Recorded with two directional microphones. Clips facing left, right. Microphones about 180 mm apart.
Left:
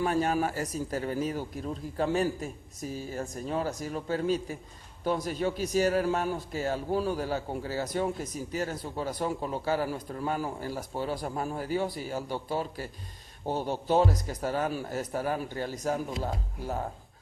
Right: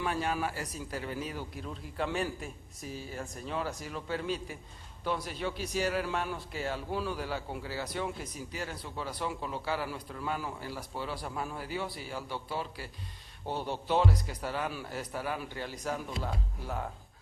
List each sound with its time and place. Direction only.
0.0 s a man's voice: 40° left (ahead or behind)